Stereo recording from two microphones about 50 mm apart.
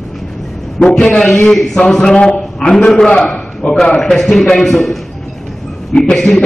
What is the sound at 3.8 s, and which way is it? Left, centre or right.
A man's voice, centre.